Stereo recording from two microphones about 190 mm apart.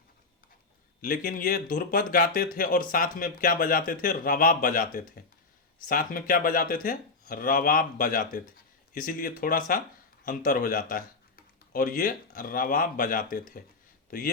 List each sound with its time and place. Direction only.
1.0 s speech: 45° left (ahead or behind)